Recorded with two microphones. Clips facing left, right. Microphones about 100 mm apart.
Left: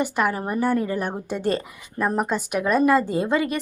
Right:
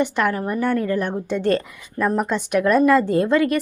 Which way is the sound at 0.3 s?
20° left (ahead or behind).